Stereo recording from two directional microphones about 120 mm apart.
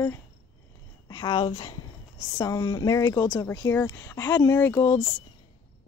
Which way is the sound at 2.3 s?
30° left (ahead or behind).